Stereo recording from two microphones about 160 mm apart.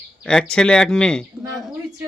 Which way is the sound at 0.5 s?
5° left (ahead or behind).